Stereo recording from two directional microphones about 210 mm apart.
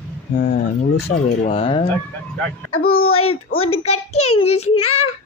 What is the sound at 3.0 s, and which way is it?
A child's voice, 90° left.